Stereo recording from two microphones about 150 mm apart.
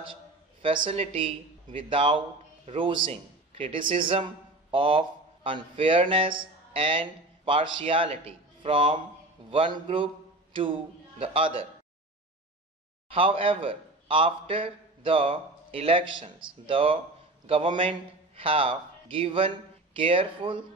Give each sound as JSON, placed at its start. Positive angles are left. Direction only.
{"t": 0.0, "sound": "a man's voice", "side_deg": -35}
{"t": 11.1, "sound": "a man's voice", "side_deg": -40}
{"t": 13.1, "sound": "a man's voice", "side_deg": -35}